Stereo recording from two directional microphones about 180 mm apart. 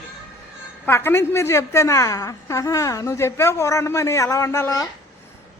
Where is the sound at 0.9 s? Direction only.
15° left (ahead or behind).